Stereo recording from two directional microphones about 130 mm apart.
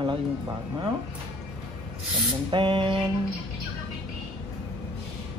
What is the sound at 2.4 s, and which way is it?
Speech, 40° right (ahead or behind).